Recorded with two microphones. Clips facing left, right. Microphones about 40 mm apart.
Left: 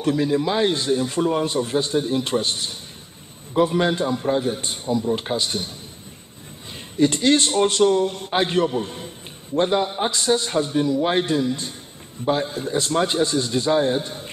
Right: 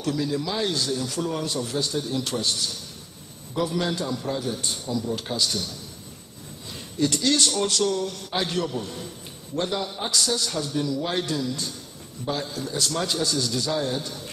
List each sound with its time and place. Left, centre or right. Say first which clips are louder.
0.0 s a man's voice: left 6 dB; left
7.0 s a man's voice: left 5 dB; left